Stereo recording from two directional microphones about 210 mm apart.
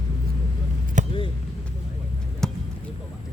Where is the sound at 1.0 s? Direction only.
35° right (ahead or behind).